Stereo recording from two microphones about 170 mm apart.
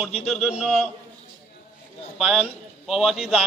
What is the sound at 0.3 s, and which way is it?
Speech, centre (ahead or behind).